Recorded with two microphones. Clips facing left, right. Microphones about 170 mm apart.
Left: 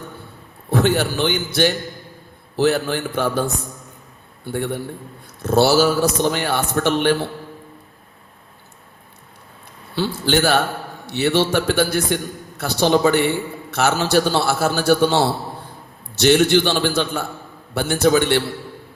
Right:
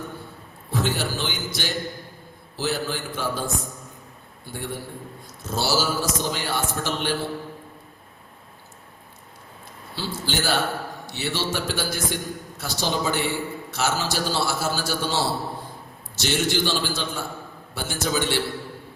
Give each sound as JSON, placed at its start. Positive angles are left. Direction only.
{"t": 0.7, "sound": "a man's voice", "side_deg": 60}
{"t": 9.9, "sound": "a man's voice", "side_deg": 60}